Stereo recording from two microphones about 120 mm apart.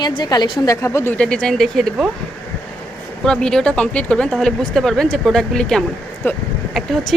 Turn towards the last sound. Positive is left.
turn(degrees=0)  # may be behind; listen again after turning